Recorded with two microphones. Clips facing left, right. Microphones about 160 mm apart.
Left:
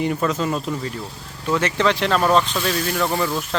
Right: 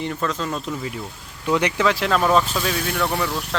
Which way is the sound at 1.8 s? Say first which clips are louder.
Left 1 dB; 5° right (ahead or behind).